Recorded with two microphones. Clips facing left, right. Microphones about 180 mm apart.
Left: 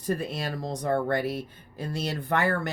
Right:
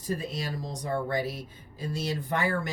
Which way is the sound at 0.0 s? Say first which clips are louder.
Left 3 dB; 60° left (ahead or behind).